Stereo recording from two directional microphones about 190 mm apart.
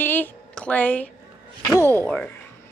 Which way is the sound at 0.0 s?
10° left (ahead or behind).